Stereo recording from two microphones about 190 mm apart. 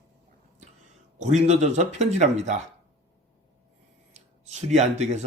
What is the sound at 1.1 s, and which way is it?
Speech, 35° right (ahead or behind).